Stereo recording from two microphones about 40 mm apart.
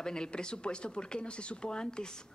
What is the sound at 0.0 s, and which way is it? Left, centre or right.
A man's voice, centre.